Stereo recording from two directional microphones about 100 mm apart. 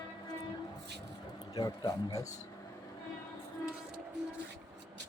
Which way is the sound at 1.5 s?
40° left (ahead or behind).